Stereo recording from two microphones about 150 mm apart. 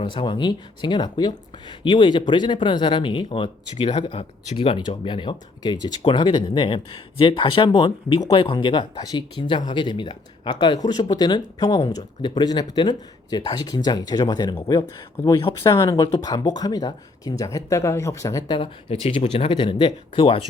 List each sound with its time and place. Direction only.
0.0 s speech: 30° left (ahead or behind)